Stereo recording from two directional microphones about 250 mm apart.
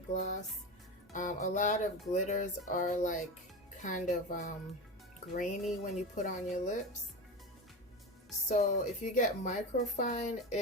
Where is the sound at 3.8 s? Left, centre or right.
Left.